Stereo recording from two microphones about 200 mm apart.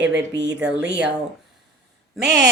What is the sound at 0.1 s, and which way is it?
Speech, 60° right (ahead or behind).